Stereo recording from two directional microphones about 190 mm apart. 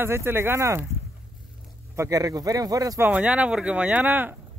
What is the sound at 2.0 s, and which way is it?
Speech, 20° right (ahead or behind).